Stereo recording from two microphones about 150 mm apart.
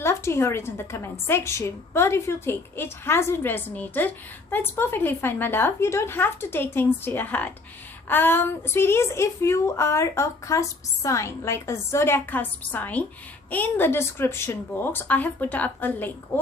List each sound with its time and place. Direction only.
0.0 s a woman's voice: 15° left (ahead or behind)